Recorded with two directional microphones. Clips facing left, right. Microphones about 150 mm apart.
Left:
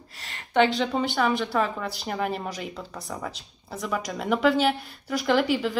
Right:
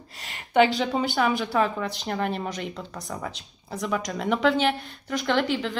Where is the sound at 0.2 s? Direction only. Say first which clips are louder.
Right 1 dB; 20° right (ahead or behind).